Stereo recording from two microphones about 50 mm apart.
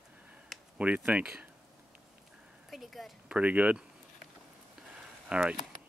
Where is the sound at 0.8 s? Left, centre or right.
Right.